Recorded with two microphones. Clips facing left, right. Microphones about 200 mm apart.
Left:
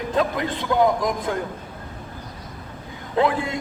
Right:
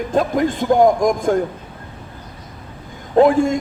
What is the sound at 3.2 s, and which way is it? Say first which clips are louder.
Speech: right 9 dB; 45° right (ahead or behind).